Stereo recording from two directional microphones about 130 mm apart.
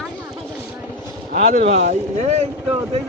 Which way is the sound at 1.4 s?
65° right (ahead or behind).